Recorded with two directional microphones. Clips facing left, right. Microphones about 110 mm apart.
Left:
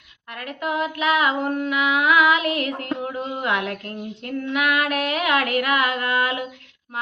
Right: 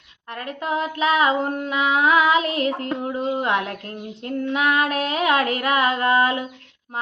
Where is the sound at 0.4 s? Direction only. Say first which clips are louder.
Even; 30° right (ahead or behind).